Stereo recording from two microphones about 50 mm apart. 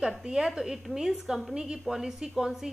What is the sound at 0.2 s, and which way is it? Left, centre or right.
A woman's voice, centre.